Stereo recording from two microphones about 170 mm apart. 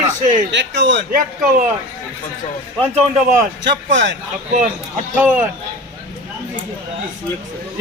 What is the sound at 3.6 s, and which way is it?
Speech, 90° right.